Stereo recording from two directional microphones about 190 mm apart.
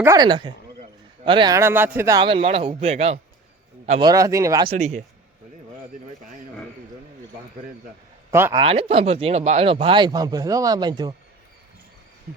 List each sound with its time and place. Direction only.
0.0 s speech: 20° right (ahead or behind); by 3.2 s 35° right (ahead or behind)
4.0 s speech: 20° right (ahead or behind)
8.3 s speech: 10° right (ahead or behind)
8.5 s speech: 30° right (ahead or behind)